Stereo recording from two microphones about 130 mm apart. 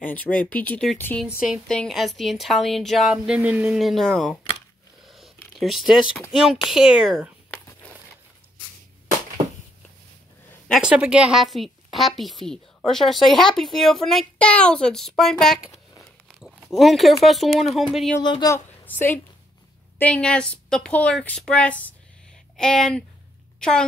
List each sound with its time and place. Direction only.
0.0 s a woman's voice: 10° left (ahead or behind)
1.2 s a woman's voice: 5° right (ahead or behind)
3.7 s a woman's voice: centre (ahead or behind)
5.0 s a sound: centre (ahead or behind)
5.6 s a woman's voice: centre (ahead or behind)
10.7 s a woman's voice: 10° right (ahead or behind)
16.7 s a woman's voice: centre (ahead or behind)
18.2 s speech: 35° left (ahead or behind)
18.5 s a woman's voice: 15° left (ahead or behind)